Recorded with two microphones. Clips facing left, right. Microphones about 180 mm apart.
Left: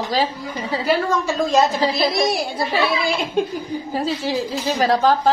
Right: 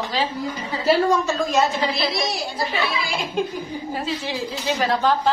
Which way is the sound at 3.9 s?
40° left (ahead or behind).